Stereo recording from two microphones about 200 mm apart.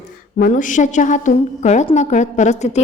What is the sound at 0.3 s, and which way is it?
A woman's voice, 40° left (ahead or behind).